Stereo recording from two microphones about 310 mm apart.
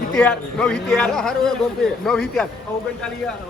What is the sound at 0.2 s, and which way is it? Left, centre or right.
Speech, centre.